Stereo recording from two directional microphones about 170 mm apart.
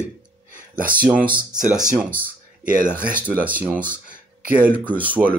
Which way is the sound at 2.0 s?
10° right (ahead or behind).